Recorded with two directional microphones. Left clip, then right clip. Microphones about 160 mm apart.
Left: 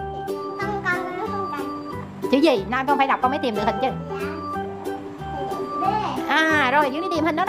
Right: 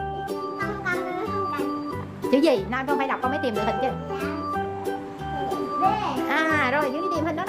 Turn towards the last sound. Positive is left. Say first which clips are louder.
# left 3 dB
turn(degrees=20)  # may be behind; listen again after turning